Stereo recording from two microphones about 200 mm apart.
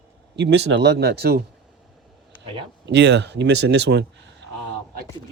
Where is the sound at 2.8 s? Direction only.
60° right (ahead or behind).